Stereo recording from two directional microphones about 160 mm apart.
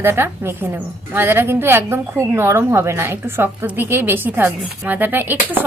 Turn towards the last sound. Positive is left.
turn(degrees=-10)  # may be behind; listen again after turning